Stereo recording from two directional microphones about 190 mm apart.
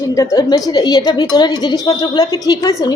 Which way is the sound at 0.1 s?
15° left (ahead or behind).